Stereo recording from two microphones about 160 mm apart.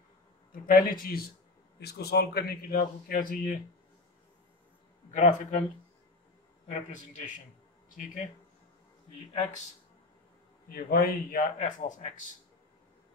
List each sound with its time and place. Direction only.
0.5 s speech: 65° left (ahead or behind)
1.8 s speech: 90° left; by 3.3 s 65° left (ahead or behind)
5.1 s a man's voice: 55° left (ahead or behind)
6.7 s a man's voice: 50° left (ahead or behind)
10.7 s speech: 70° left (ahead or behind); by 12.1 s 55° left (ahead or behind)